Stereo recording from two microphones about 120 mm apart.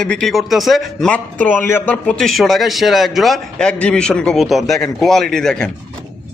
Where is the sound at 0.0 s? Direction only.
5° left (ahead or behind).